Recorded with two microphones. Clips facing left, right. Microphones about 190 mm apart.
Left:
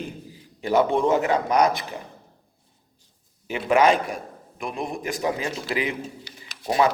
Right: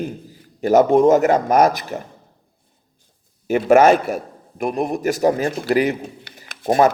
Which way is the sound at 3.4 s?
45° right (ahead or behind).